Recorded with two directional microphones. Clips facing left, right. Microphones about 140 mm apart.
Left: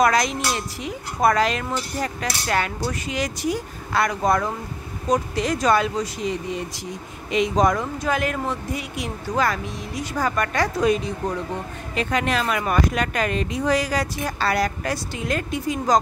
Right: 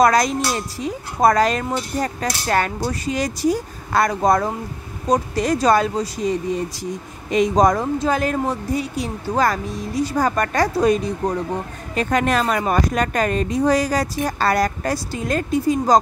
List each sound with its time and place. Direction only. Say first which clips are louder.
0.0 s speech: right 4 dB; 40° right (ahead or behind)